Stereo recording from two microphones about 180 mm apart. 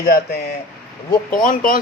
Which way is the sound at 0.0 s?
55° left (ahead or behind).